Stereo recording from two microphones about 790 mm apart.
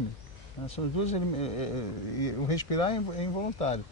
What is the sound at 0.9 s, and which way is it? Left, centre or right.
Speech, left.